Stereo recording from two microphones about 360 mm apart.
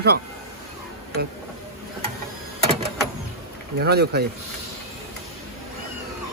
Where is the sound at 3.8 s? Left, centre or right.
Right.